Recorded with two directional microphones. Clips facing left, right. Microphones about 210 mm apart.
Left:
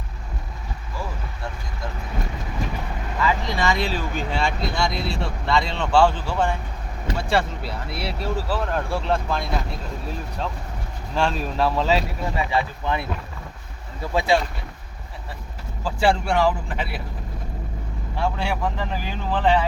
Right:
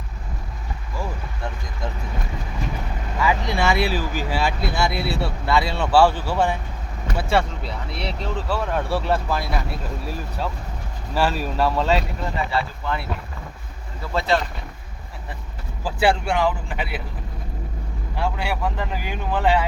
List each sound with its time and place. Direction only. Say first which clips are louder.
3.2 s speech: right 2 dB; 10° right (ahead or behind)
12.5 s speech: left 1 dB; 15° left (ahead or behind)
14.1 s speech: left 1 dB; 10° left (ahead or behind)
16.0 s speech: even; centre (ahead or behind)
18.2 s speech: even; 5° right (ahead or behind)